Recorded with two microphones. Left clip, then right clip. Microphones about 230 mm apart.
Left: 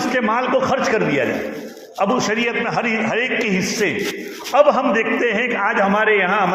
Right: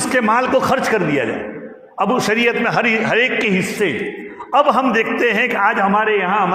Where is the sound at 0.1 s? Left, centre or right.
Right.